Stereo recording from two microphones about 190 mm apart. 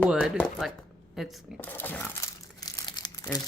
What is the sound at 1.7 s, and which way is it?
Speech, 10° left (ahead or behind).